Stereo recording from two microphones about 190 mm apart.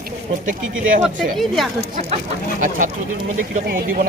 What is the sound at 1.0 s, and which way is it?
Speech, centre (ahead or behind).